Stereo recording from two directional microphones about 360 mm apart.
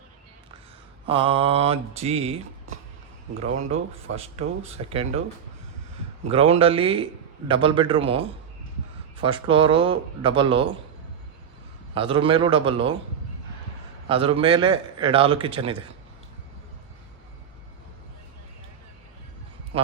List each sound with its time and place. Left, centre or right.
1.0 s a man's voice: centre
3.7 s a man's voice: centre
6.2 s a man's voice: centre
9.2 s a man's voice: centre
11.9 s a man's voice: centre
14.1 s a man's voice: centre